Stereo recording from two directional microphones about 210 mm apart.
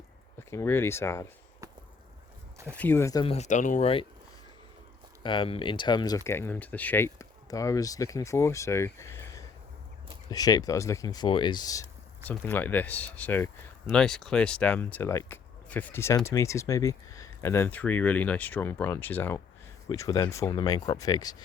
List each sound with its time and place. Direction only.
0.3 s speech: 10° left (ahead or behind)
2.7 s speech: 10° left (ahead or behind)
3.3 s speech: 35° left (ahead or behind)
5.2 s speech: 25° left (ahead or behind)